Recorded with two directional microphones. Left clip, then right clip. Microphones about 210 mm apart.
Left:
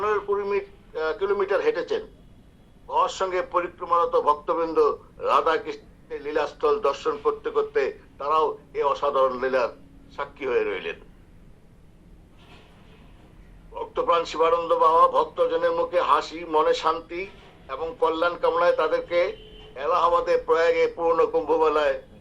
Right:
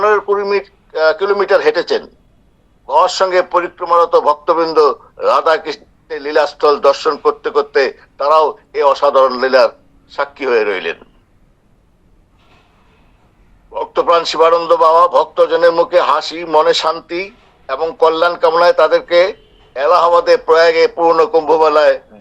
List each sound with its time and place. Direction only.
0.0 s a man's voice: 45° right (ahead or behind)
13.7 s a man's voice: 50° right (ahead or behind)